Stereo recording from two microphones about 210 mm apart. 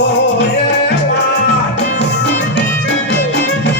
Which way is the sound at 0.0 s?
55° left (ahead or behind).